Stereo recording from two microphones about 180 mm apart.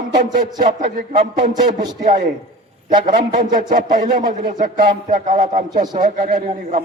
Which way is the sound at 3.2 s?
45° right (ahead or behind).